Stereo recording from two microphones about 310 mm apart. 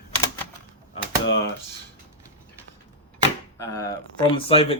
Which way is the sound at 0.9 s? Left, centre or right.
Left.